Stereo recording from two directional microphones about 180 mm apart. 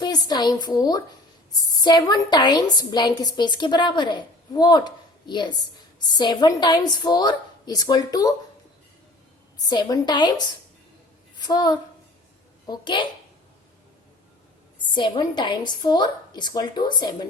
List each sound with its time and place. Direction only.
0.0 s a woman's voice: 25° left (ahead or behind)
9.6 s a woman's voice: 25° left (ahead or behind)
14.9 s a woman's voice: 25° left (ahead or behind)